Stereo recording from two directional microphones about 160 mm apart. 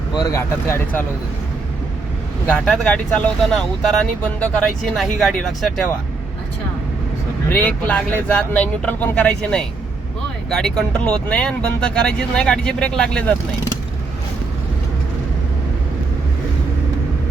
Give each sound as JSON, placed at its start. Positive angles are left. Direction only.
{"t": 0.1, "sound": "speech", "side_deg": 20}
{"t": 2.5, "sound": "speech", "side_deg": 5}
{"t": 7.5, "sound": "speech", "side_deg": 10}